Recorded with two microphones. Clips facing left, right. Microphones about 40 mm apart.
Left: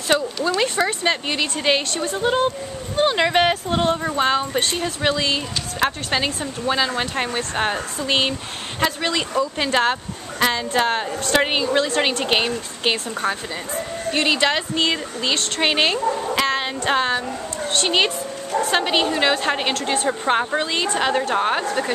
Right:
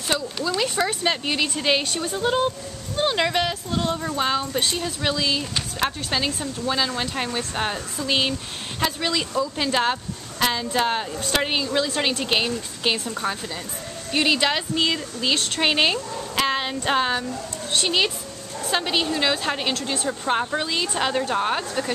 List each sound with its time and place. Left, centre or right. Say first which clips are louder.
0.4 s speech: left 4 dB; left
0.7 s speech: left 3 dB; centre
3.3 s speech: left 6 dB; left
3.9 s speech: left 4 dB; left
14.1 s speech: left 1 dB; centre
16.0 s speech: left 9 dB; left
16.3 s speech: left 2 dB; centre
17.8 s speech: left 4 dB; centre
19.8 s speech: left 5 dB; left